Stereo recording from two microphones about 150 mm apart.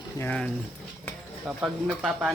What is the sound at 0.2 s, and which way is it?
Speech, 10° left (ahead or behind).